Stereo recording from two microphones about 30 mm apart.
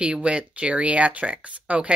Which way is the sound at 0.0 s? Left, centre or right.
Right.